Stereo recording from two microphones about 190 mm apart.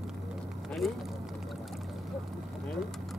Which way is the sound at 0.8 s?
Centre (ahead or behind).